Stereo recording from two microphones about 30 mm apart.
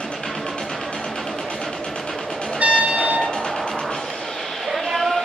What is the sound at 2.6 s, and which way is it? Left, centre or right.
Vehicle, right.